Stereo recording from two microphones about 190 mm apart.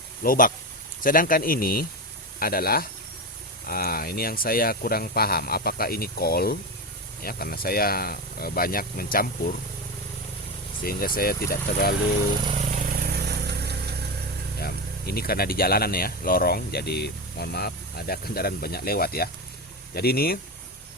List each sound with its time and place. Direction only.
0.2 s speech: 45° left (ahead or behind)
10.8 s speech: 50° left (ahead or behind)
13.0 s vehicle: 55° right (ahead or behind)
14.6 s speech: 55° left (ahead or behind)